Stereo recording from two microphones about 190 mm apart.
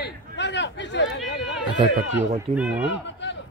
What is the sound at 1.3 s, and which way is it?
Run, 65° left (ahead or behind).